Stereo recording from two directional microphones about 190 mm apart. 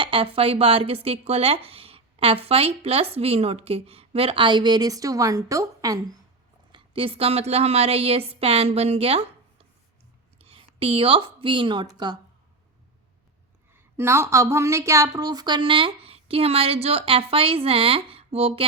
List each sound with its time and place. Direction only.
0.0 s a woman's voice: 25° right (ahead or behind)
10.3 s a woman's voice: 30° right (ahead or behind)
13.7 s speech: 15° right (ahead or behind); by 18.6 s 30° right (ahead or behind)